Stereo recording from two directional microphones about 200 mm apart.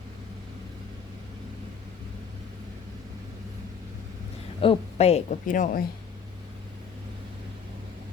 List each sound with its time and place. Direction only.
4.6 s a woman's voice: 30° left (ahead or behind)